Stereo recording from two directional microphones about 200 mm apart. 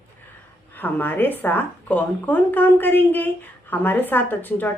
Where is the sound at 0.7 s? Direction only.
10° left (ahead or behind).